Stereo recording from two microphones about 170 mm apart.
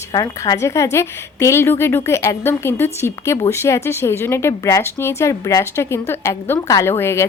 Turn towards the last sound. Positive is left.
turn(degrees=15)  # may be behind; listen again after turning